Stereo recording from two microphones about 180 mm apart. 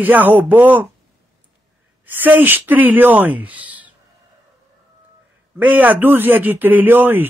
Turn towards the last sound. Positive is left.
turn(degrees=-10)  # may be behind; listen again after turning